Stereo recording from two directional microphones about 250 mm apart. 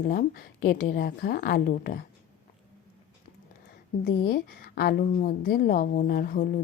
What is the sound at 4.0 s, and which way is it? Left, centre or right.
A woman's voice, left.